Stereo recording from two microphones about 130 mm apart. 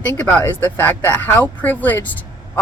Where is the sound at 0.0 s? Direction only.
10° left (ahead or behind).